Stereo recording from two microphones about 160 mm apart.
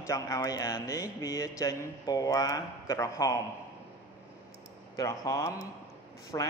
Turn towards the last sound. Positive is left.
turn(degrees=25)  # may be behind; listen again after turning